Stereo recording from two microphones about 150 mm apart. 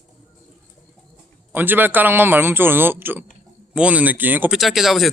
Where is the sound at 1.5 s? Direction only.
10° right (ahead or behind).